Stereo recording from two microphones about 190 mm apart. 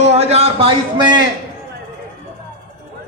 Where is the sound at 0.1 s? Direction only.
35° right (ahead or behind).